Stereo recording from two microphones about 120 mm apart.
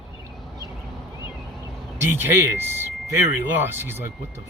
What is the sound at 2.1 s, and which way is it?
Speech, 20° right (ahead or behind).